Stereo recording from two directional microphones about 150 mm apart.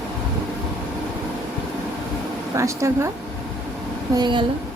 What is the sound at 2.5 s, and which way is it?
Speech, 20° right (ahead or behind).